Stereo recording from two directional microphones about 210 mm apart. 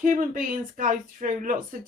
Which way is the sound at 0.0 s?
40° right (ahead or behind).